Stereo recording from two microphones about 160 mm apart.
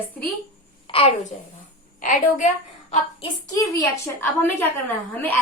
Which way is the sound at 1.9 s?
55° left (ahead or behind).